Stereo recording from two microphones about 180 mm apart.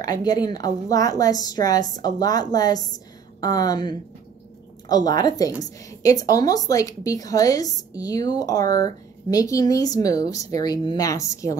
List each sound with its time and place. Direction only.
0.0 s a woman's voice: 20° left (ahead or behind)